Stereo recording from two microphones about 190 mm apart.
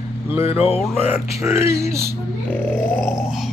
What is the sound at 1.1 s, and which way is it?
Speech, 10° right (ahead or behind).